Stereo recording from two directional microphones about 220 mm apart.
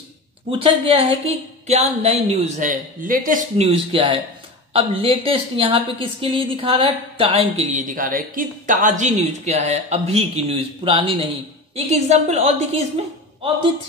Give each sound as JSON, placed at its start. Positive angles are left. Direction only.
{"t": 0.5, "sound": "a woman's voice", "side_deg": -25}